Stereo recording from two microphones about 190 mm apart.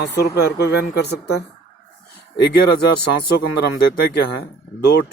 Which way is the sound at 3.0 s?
55° left (ahead or behind).